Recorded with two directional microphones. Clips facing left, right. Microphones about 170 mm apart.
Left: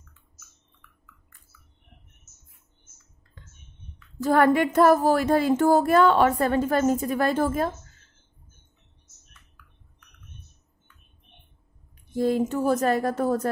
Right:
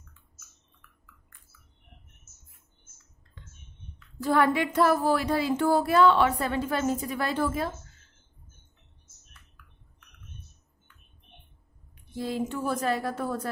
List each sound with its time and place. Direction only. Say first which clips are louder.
4.2 s a woman's voice: left 4 dB; 45° left (ahead or behind)
12.1 s a woman's voice: left 7 dB; 45° left (ahead or behind)